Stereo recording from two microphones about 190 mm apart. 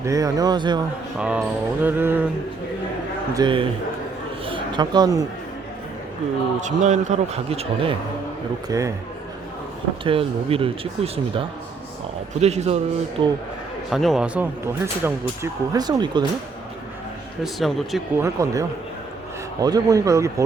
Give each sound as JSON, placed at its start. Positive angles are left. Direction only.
{"t": 0.0, "sound": "speech", "side_deg": -15}
{"t": 1.2, "sound": "mantra", "side_deg": -5}
{"t": 3.3, "sound": "speech", "side_deg": -25}
{"t": 4.4, "sound": "a sound", "side_deg": -25}
{"t": 6.6, "sound": "a man's voice", "side_deg": -40}
{"t": 8.7, "sound": "mantra", "side_deg": -15}
{"t": 10.0, "sound": "a man's voice", "side_deg": -30}
{"t": 13.9, "sound": "speech", "side_deg": 0}
{"t": 15.4, "sound": "speech", "side_deg": -20}
{"t": 17.4, "sound": "speech", "side_deg": 0}
{"t": 18.2, "sound": "mantra", "side_deg": -15}
{"t": 19.6, "sound": "mantra", "side_deg": -20}